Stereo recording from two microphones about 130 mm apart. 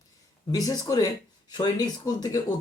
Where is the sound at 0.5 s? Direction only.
30° left (ahead or behind).